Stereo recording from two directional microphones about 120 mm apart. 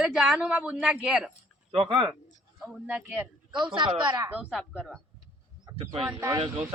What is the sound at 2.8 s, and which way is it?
Speech, 10° right (ahead or behind).